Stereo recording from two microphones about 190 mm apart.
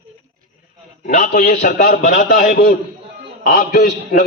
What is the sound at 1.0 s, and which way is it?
A man's voice, 50° left (ahead or behind).